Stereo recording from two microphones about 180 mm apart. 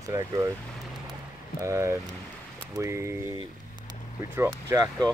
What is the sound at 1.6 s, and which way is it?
Speech, 15° right (ahead or behind).